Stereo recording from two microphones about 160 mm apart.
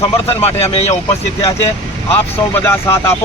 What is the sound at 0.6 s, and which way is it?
Speech, 40° left (ahead or behind).